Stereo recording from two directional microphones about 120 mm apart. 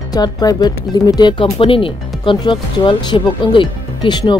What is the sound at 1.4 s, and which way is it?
Speech, 50° left (ahead or behind).